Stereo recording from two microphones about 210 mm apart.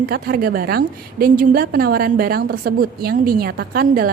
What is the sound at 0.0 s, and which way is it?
A woman's voice, 45° right (ahead or behind).